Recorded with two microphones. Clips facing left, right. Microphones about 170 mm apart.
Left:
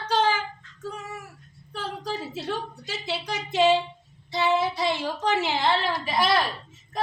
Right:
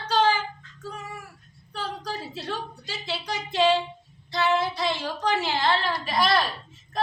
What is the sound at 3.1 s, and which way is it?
Speech, 20° left (ahead or behind).